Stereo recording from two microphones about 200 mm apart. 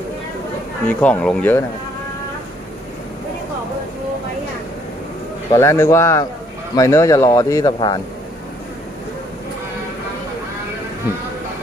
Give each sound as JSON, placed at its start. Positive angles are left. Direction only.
{"t": 0.8, "sound": "speech", "side_deg": 5}
{"t": 5.5, "sound": "speech", "side_deg": 15}